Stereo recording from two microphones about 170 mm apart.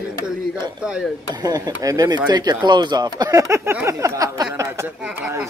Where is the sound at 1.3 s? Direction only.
20° right (ahead or behind).